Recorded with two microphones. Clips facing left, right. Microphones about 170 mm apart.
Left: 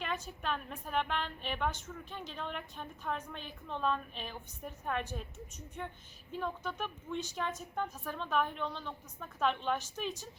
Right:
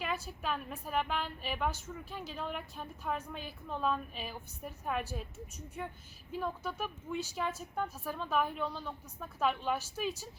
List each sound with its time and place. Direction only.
0.0 s a woman's voice: 5° right (ahead or behind)